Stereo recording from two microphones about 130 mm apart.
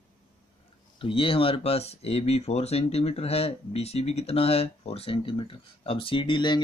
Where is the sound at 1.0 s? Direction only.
45° left (ahead or behind).